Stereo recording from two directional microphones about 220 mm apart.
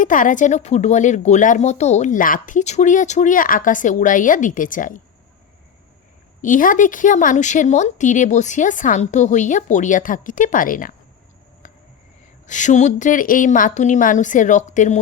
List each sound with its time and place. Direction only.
0.0 s speech: 35° left (ahead or behind)
6.4 s speech: 35° left (ahead or behind)
12.5 s speech: 35° left (ahead or behind)